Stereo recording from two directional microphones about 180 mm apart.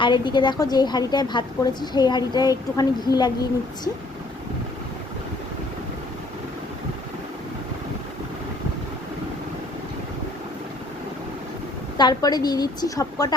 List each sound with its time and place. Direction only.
0.0 s a woman's voice: 25° left (ahead or behind)
11.9 s a woman's voice: 25° left (ahead or behind)